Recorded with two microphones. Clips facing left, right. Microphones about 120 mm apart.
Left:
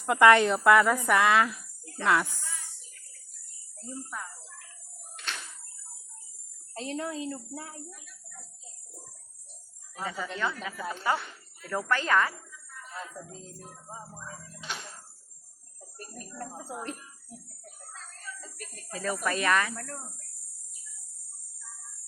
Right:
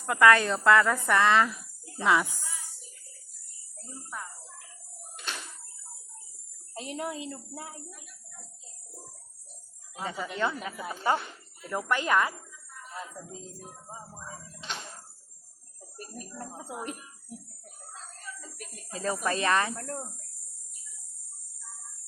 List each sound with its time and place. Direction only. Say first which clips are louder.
0.0 s a woman's voice: left 2 dB; 20° left (ahead or behind); by 1.5 s 5° left (ahead or behind)
1.5 s cricket: right 1 dB; 15° right (ahead or behind)
2.0 s speech: right 1 dB; 5° right (ahead or behind)
3.8 s speech: left 2 dB; 5° right (ahead or behind)
6.7 s speech: left 1 dB; 15° right (ahead or behind)
9.9 s speech: even; 25° right (ahead or behind)
12.9 s music: even; 15° right (ahead or behind)
13.3 s speech: right 2 dB; 10° right (ahead or behind)
14.5 s a sound: even; 5° left (ahead or behind)
16.4 s a sound: left 1 dB; 20° right (ahead or behind)
18.4 s a sound: even; 5° right (ahead or behind)
18.9 s speech: right 1 dB; 25° right (ahead or behind)